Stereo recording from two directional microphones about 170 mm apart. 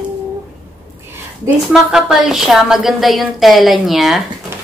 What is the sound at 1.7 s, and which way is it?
A woman's voice, centre (ahead or behind).